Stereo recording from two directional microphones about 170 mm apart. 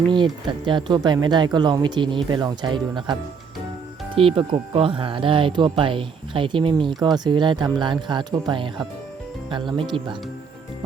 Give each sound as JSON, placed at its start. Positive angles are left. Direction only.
{"t": 0.1, "sound": "speech", "side_deg": -25}